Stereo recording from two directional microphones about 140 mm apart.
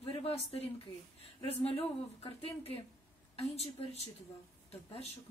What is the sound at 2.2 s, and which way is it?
Speech, 45° left (ahead or behind).